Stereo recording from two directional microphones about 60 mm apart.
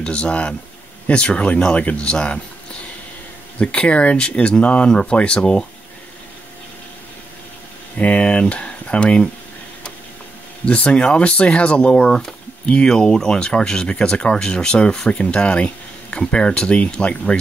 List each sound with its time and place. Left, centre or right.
0.0 s speech: centre
3.5 s speech: centre
8.0 s speech: left
10.6 s speech: centre